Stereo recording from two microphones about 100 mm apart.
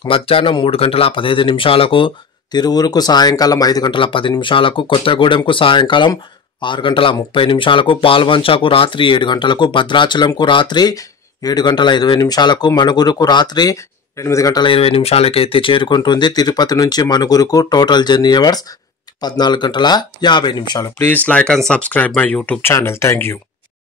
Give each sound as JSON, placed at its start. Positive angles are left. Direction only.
{"t": 0.0, "sound": "speech", "side_deg": 65}
{"t": 2.6, "sound": "speech", "side_deg": 40}
{"t": 3.9, "sound": "speech", "side_deg": 60}
{"t": 14.6, "sound": "speech", "side_deg": 65}
{"t": 21.0, "sound": "speech", "side_deg": 15}